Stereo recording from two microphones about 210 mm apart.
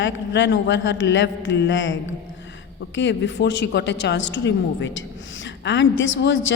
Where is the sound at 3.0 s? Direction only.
60° left (ahead or behind).